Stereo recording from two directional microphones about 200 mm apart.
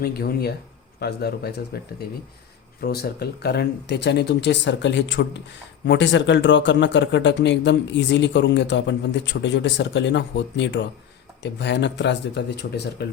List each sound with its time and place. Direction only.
0.0 s speech: 50° left (ahead or behind)
2.8 s speech: 50° left (ahead or behind)